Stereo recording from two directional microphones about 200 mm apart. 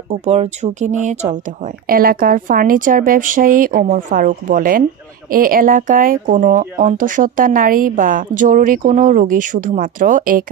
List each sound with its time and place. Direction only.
0.1 s speech: 35° right (ahead or behind)
1.9 s speech: 45° right (ahead or behind)